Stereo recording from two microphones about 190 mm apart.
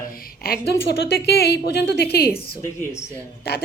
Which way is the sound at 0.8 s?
60° left (ahead or behind).